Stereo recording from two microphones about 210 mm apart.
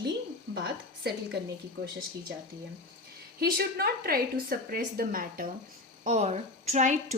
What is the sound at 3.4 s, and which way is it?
A woman's voice, 45° right (ahead or behind).